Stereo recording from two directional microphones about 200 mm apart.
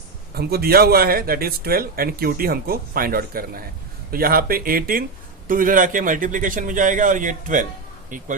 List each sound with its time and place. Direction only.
0.3 s a man's voice: 50° right (ahead or behind)